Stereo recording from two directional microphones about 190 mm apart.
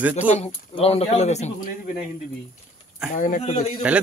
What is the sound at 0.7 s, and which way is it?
Speech, 35° left (ahead or behind).